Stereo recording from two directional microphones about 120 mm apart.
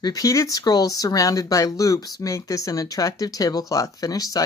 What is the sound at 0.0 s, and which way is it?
Speech, 30° left (ahead or behind).